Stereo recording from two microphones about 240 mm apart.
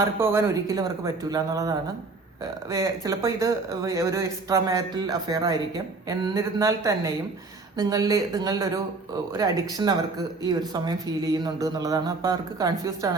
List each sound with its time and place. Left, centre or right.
0.0 s speech: centre